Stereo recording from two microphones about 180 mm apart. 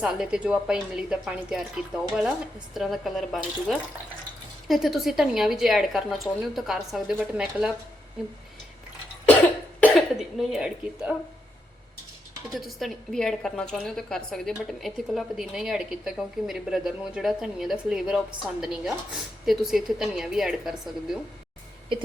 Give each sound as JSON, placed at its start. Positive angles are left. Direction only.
{"t": 0.0, "sound": "a woman's voice", "side_deg": -5}
{"t": 9.8, "sound": "speech", "side_deg": 0}
{"t": 12.5, "sound": "a woman's voice", "side_deg": 0}